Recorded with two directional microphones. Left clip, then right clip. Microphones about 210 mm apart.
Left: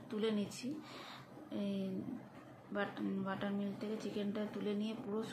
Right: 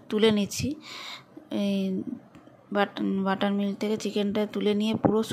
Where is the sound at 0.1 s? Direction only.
50° right (ahead or behind).